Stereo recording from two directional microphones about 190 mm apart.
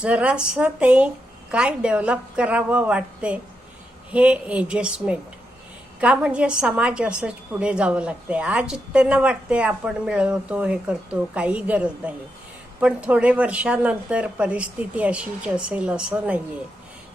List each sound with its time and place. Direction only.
0.0 s a woman's voice: 5° right (ahead or behind)